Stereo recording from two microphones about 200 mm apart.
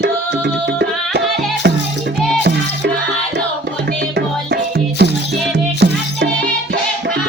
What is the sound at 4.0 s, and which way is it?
Music, 55° right (ahead or behind).